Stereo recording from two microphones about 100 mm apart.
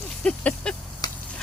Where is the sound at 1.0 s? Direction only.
40° left (ahead or behind).